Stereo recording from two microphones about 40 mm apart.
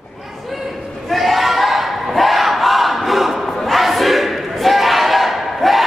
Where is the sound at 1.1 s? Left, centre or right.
Centre.